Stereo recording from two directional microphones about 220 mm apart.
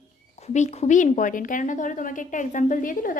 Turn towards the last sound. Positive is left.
turn(degrees=40)  # may be behind; listen again after turning